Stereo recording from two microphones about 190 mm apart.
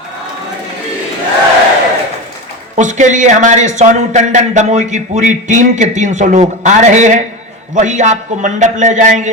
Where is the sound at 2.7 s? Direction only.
40° right (ahead or behind).